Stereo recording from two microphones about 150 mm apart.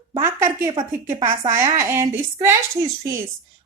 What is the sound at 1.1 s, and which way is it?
Speech, 40° right (ahead or behind).